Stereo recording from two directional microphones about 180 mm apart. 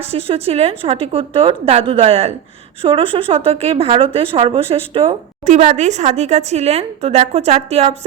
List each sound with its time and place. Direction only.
0.0 s speech: 35° right (ahead or behind)